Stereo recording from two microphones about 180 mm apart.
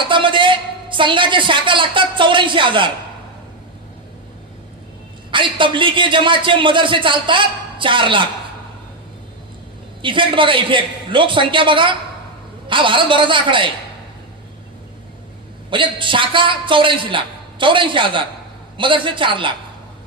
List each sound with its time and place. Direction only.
0.0 s a woman's voice: 25° right (ahead or behind)
5.3 s a man's voice: 25° right (ahead or behind)
10.0 s a man's voice: 30° right (ahead or behind)
15.7 s a man's voice: 25° right (ahead or behind)